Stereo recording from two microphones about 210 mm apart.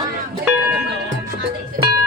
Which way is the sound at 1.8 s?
40° right (ahead or behind).